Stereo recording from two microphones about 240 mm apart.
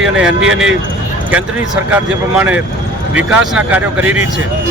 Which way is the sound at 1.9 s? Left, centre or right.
Centre.